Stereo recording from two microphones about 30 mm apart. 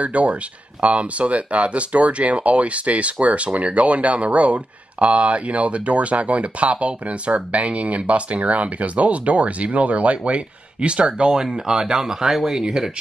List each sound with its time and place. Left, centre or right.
0.0 s speech: right; by 12.5 s centre
12.5 s speech: right